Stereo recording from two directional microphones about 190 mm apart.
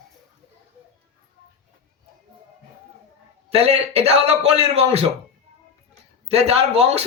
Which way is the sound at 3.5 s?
30° right (ahead or behind).